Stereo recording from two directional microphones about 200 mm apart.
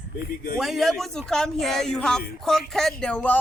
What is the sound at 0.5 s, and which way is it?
Speech, centre (ahead or behind).